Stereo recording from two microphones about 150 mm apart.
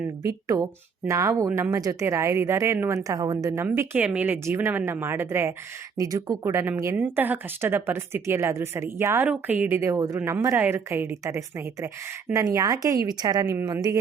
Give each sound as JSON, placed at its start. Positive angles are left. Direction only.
{"t": 0.4, "sound": "speech", "side_deg": -25}